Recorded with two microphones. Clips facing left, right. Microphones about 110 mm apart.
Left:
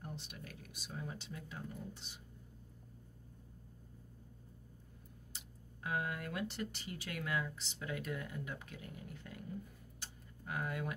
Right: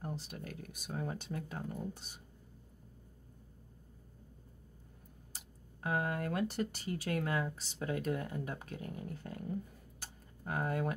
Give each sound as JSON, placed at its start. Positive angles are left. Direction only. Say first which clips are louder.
{"t": 0.0, "sound": "speech", "louder": "right 6 dB", "side_deg": -40}
{"t": 5.3, "sound": "speech", "louder": "right 1 dB", "side_deg": -40}